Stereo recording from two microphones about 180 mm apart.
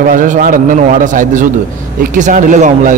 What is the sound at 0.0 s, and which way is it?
A man's voice, 50° right (ahead or behind).